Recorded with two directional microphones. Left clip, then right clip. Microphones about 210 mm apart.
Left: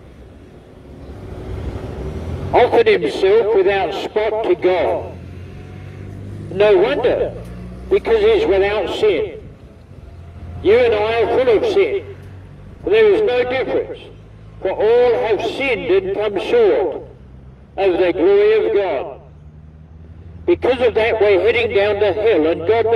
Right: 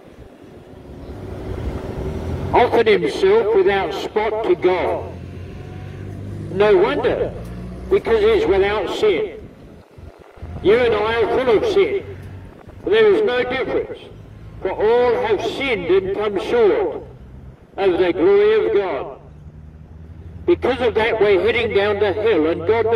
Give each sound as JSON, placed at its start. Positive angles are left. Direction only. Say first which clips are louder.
{"t": 1.6, "sound": "vehicle", "louder": "right 1 dB", "side_deg": -25}
{"t": 2.5, "sound": "a man's voice", "louder": "left 2 dB", "side_deg": 35}
{"t": 5.0, "sound": "vehicle", "louder": "left 1 dB", "side_deg": 0}
{"t": 6.8, "sound": "a man's voice", "louder": "left 2 dB", "side_deg": 35}
{"t": 10.6, "sound": "a man's voice", "louder": "left 2 dB", "side_deg": 30}
{"t": 20.4, "sound": "a man's voice", "louder": "left 2 dB", "side_deg": 30}